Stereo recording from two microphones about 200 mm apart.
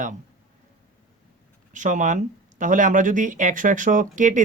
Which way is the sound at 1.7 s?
40° right (ahead or behind).